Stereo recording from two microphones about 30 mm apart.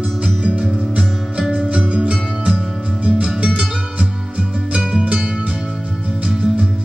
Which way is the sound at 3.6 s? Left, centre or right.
Right.